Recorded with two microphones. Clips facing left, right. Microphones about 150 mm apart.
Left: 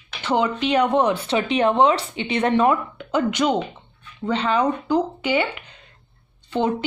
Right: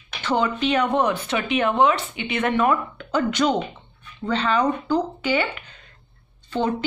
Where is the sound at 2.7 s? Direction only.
20° left (ahead or behind).